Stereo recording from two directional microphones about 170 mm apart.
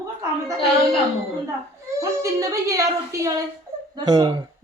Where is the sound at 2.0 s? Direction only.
20° right (ahead or behind).